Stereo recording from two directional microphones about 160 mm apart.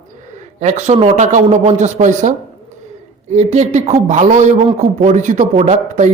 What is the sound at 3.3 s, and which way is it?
A man's voice, 45° right (ahead or behind).